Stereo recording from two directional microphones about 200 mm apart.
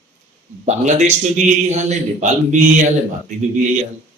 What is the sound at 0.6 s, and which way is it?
A man's voice, 35° right (ahead or behind).